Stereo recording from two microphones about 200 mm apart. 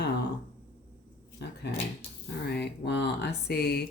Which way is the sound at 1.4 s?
55° left (ahead or behind).